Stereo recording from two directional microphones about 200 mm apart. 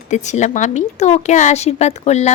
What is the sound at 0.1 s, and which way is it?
A woman's voice, 35° left (ahead or behind).